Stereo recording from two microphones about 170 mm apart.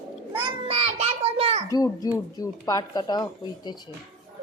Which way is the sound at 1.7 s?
20° left (ahead or behind).